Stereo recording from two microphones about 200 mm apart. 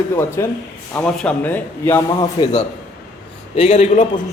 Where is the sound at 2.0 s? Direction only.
20° left (ahead or behind).